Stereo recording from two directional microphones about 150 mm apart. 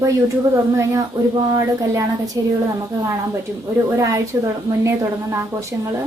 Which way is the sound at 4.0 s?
20° right (ahead or behind).